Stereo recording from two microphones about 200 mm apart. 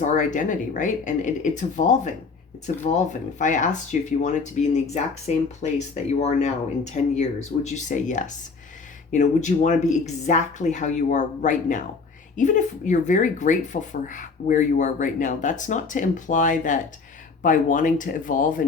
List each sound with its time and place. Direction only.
0.0 s speech: 35° left (ahead or behind)